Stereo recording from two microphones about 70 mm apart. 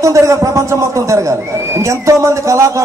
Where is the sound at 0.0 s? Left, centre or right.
Right.